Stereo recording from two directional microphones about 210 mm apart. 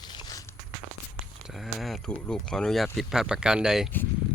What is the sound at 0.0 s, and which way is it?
Walk, 20° left (ahead or behind).